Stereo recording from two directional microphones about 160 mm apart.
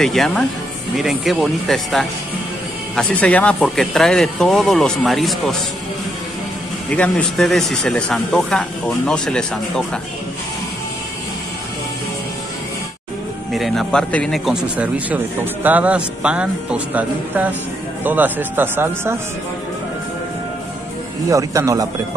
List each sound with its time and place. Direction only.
0.0 s speech: centre (ahead or behind)
6.9 s speech: 5° left (ahead or behind)
13.5 s speech: centre (ahead or behind)
21.3 s a man's voice: 20° right (ahead or behind)